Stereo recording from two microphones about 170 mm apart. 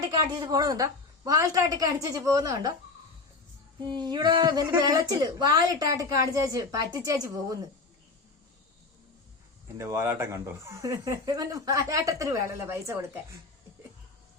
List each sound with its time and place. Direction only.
0.2 s a woman's voice: 25° right (ahead or behind)
3.8 s a woman's voice: 25° right (ahead or behind)
9.7 s speech: 15° right (ahead or behind)